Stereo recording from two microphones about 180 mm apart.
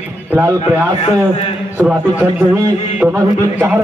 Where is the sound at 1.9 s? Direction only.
10° right (ahead or behind).